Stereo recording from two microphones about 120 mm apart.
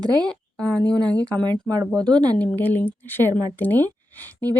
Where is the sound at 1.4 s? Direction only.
35° right (ahead or behind).